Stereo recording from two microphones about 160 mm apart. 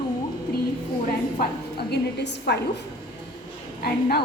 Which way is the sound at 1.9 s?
90° left.